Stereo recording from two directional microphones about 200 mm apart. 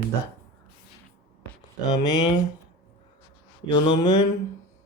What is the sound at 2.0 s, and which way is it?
Mantra, 20° left (ahead or behind).